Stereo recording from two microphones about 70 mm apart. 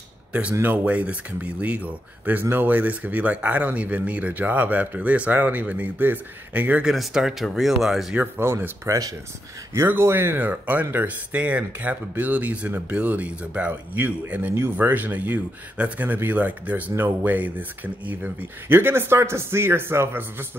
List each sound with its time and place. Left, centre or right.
0.3 s speech: centre
6.8 s speech: centre
8.2 s speech: right
8.8 s speech: right
9.8 s speech: right